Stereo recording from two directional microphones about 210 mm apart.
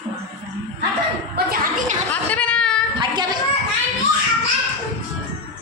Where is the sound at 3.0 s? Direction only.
20° right (ahead or behind).